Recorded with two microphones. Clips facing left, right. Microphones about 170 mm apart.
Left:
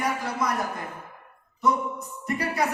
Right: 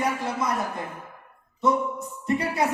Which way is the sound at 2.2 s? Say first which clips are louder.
Right 3 dB; 25° right (ahead or behind).